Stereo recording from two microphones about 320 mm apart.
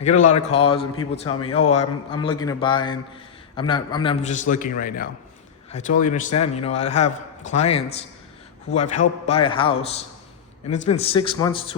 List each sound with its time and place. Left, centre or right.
0.0 s a man's voice: left